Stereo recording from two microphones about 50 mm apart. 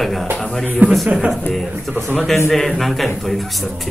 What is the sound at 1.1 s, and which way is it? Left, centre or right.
Speech, centre.